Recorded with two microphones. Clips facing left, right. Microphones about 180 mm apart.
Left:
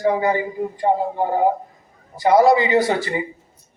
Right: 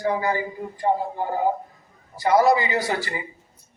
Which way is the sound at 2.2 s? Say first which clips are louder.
Left 4 dB; 20° left (ahead or behind).